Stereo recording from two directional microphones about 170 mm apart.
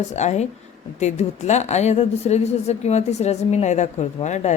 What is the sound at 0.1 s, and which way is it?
A woman's voice, 40° left (ahead or behind).